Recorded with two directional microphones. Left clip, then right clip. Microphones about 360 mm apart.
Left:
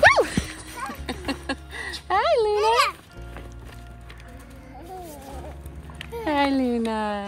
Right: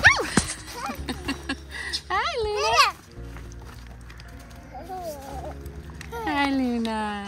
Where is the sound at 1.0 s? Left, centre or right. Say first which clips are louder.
Left 1 dB; centre.